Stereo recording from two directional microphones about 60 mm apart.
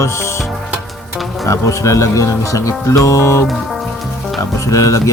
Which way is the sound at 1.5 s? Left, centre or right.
Left.